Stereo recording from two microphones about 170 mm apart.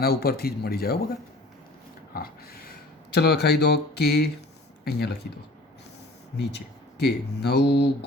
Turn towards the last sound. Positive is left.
turn(degrees=75)  # may be behind; listen again after turning